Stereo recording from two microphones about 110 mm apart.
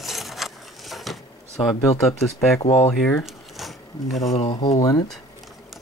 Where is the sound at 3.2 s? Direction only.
Centre (ahead or behind).